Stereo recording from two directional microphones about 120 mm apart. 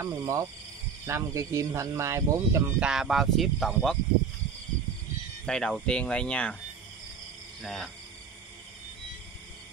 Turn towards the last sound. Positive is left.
turn(degrees=0)  # may be behind; listen again after turning